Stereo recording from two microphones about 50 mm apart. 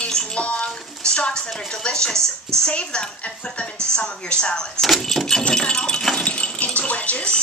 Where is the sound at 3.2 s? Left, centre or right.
Left.